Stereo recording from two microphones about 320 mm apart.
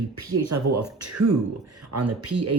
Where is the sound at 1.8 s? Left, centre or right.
Right.